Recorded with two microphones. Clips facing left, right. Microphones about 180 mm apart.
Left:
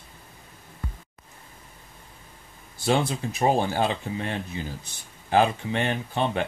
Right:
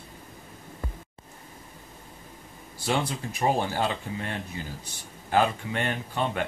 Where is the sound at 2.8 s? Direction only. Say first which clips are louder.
Left 4 dB; 25° left (ahead or behind).